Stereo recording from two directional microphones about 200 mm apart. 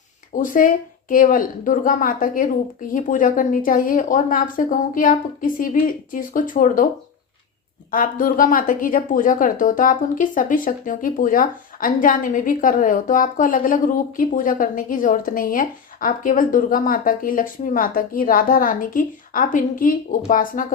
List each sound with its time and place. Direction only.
0.3 s speech: 40° left (ahead or behind)
7.9 s speech: 45° left (ahead or behind)